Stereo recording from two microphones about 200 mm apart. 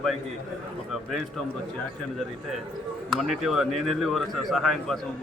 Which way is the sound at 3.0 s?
Centre (ahead or behind).